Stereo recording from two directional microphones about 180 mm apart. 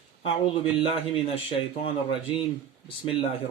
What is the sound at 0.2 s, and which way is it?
A man's voice, 30° left (ahead or behind).